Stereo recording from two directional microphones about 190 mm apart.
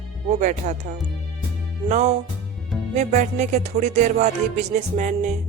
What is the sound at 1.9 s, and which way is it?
A man's voice, 40° right (ahead or behind).